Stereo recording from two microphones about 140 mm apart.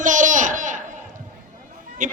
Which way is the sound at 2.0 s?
65° right (ahead or behind).